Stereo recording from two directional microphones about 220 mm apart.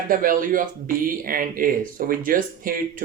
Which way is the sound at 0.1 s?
40° right (ahead or behind).